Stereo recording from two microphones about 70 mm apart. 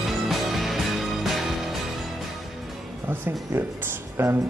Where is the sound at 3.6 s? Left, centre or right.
Right.